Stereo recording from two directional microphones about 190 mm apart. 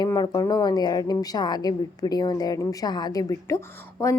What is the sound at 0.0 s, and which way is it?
A woman's voice, 20° left (ahead or behind).